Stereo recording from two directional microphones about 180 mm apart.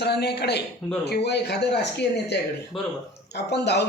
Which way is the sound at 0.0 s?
65° left (ahead or behind).